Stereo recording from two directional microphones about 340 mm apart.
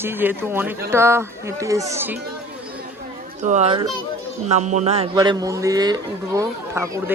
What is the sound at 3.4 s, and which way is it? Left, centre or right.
A child's voice, right.